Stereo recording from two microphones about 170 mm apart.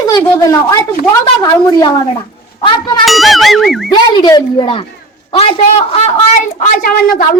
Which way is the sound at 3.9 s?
25° left (ahead or behind).